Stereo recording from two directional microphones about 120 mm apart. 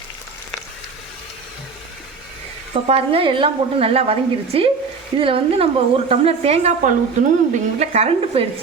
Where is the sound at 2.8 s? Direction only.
50° right (ahead or behind).